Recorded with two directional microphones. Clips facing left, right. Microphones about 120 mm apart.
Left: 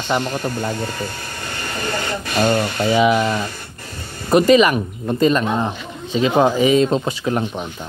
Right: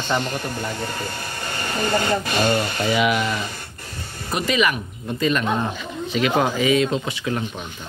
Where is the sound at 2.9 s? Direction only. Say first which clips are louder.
Left 5 dB; 30° left (ahead or behind).